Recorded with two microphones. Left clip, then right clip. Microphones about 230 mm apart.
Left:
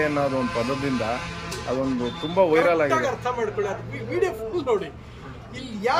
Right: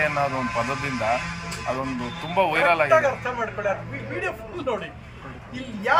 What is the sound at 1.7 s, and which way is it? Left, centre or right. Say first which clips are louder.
Speech: left 3 dB; centre.